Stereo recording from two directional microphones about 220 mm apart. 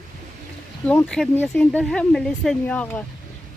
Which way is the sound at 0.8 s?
5° left (ahead or behind).